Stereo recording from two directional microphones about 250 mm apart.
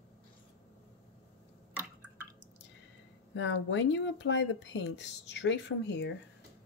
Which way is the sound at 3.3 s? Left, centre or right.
Left.